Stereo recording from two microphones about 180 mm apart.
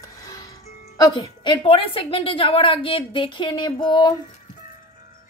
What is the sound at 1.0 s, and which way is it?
A woman's voice, 25° left (ahead or behind).